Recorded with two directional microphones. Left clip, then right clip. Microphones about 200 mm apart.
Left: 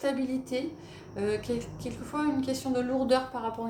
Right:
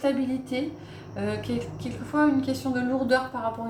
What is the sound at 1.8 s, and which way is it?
Speech, 35° left (ahead or behind).